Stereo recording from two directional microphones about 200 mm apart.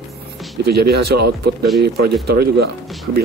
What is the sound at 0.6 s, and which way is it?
Speech, 50° right (ahead or behind).